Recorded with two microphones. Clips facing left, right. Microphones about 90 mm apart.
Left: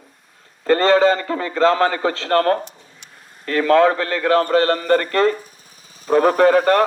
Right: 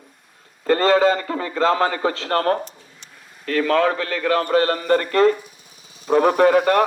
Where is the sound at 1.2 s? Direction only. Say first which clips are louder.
Left 2 dB; 50° left (ahead or behind).